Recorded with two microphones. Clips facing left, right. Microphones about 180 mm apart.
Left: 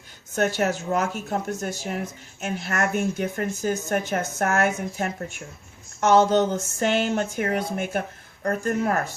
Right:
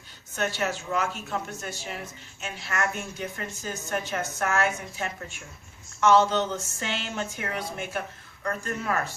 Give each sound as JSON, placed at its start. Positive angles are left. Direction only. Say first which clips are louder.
{"t": 0.3, "sound": "speech", "louder": "left 6 dB", "side_deg": 45}